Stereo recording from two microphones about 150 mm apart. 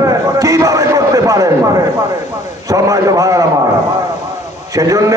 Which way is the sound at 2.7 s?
25° right (ahead or behind).